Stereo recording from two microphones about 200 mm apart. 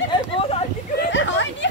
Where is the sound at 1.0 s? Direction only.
65° left (ahead or behind).